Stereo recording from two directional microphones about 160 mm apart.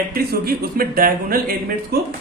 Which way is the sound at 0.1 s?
70° right (ahead or behind).